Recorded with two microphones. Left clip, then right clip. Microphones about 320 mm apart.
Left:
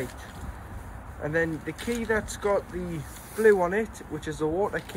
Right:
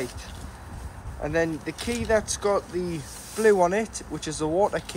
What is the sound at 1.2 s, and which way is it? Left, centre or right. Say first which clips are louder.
Speech: right 2 dB; right.